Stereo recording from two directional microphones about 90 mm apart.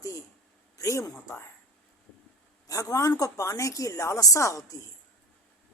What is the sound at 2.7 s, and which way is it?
Speech, 40° left (ahead or behind).